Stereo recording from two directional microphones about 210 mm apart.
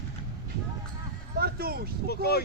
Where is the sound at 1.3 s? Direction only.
45° right (ahead or behind).